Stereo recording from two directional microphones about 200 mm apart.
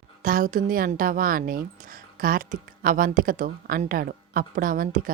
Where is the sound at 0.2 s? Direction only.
45° right (ahead or behind).